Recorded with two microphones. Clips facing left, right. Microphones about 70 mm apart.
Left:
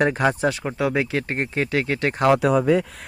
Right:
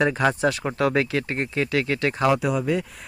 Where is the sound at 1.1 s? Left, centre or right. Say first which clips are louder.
Left 1 dB; left.